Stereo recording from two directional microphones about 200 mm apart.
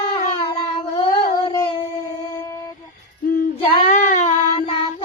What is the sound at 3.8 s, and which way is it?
Child singing, 40° left (ahead or behind).